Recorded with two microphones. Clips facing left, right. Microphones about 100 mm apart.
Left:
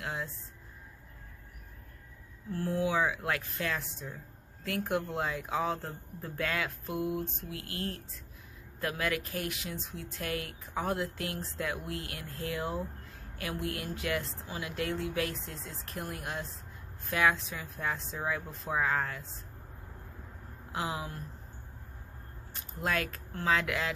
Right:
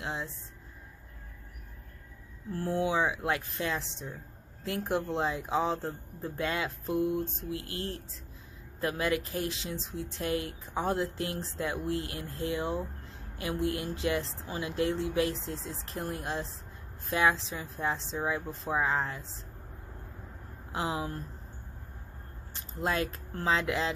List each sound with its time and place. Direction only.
0.0 s a sound: 20° right (ahead or behind)
2.5 s speech: 30° right (ahead or behind)
20.7 s speech: 25° right (ahead or behind)
22.5 s speech: 25° right (ahead or behind)